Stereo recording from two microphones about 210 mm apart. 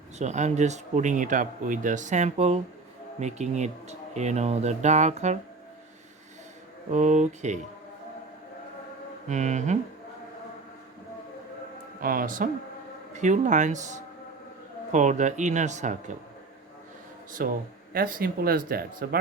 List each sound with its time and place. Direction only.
0.2 s speech: 35° right (ahead or behind)
6.9 s speech: 35° right (ahead or behind)
9.3 s speech: 35° right (ahead or behind)
12.0 s speech: 40° right (ahead or behind)
17.4 s speech: 45° right (ahead or behind)